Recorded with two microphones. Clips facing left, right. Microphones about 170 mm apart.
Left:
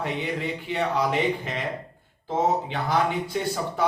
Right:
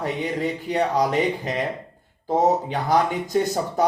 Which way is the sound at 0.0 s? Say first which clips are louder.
Right 4 dB; 40° right (ahead or behind).